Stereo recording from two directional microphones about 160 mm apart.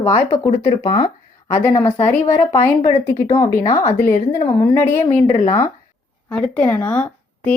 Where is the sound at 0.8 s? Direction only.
30° left (ahead or behind).